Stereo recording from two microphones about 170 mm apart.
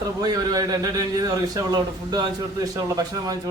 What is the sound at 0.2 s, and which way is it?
A man's voice, 20° right (ahead or behind).